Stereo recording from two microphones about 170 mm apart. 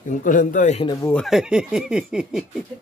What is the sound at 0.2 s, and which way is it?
Speech, 50° left (ahead or behind).